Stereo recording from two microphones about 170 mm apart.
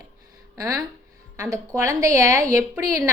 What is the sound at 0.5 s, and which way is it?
A woman's voice, 20° right (ahead or behind).